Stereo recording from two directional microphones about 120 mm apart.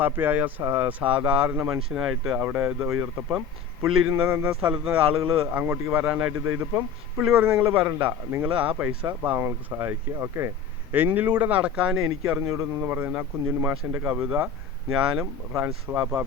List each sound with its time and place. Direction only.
0.0 s speech: 15° right (ahead or behind)
1.9 s speech: 5° right (ahead or behind)
2.4 s speech: 15° right (ahead or behind)
12.2 s speech: 20° right (ahead or behind)